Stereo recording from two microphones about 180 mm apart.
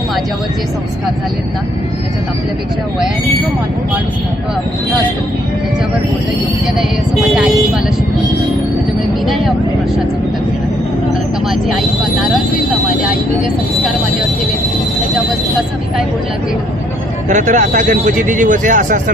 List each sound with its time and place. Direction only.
17.2 s a man's voice: 45° right (ahead or behind)